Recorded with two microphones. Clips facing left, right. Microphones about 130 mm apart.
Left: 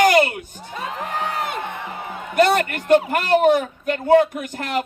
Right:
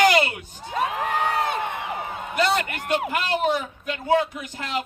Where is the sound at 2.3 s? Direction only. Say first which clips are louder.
Left 6 dB; 55° left (ahead or behind).